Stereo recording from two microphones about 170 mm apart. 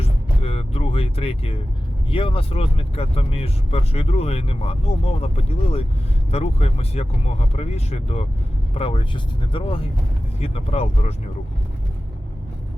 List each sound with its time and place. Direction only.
0.0 s music: 35° left (ahead or behind)
2.0 s speech: 30° left (ahead or behind)